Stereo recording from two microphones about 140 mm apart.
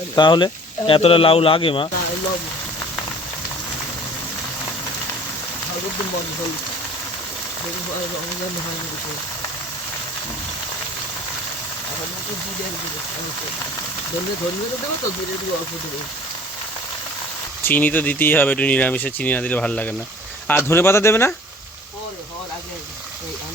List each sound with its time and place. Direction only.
0.2 s speech: 30° left (ahead or behind)
17.6 s speech: 15° left (ahead or behind)